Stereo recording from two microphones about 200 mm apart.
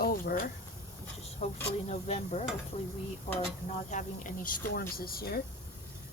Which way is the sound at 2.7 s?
30° left (ahead or behind).